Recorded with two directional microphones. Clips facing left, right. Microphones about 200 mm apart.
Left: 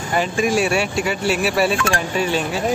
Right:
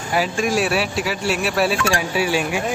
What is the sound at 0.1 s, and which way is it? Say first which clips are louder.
Speech: left 1 dB; centre (ahead or behind).